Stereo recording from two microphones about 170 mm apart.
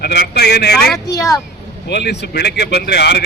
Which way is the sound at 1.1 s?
20° left (ahead or behind).